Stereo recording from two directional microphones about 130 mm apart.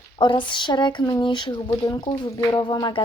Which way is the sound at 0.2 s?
35° left (ahead or behind).